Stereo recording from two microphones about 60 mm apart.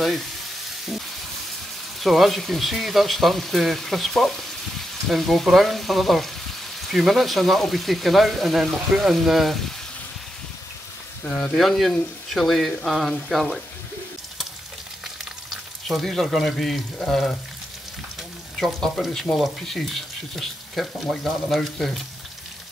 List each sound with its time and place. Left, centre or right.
2.0 s speech: centre
11.2 s speech: left
11.5 s speech: centre
15.9 s speech: centre
18.6 s speech: centre